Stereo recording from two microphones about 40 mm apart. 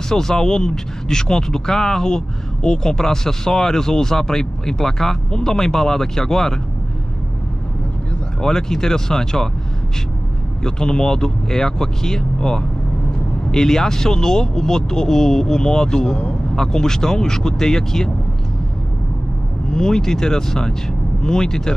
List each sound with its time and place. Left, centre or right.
0.1 s speech: centre
8.4 s speech: centre
10.6 s speech: centre
19.7 s speech: centre